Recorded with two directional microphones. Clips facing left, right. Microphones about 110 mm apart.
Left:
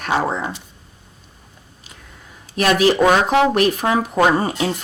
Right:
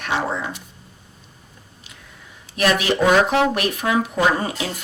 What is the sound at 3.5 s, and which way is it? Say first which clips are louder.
Speech: left 5 dB; 35° left (ahead or behind).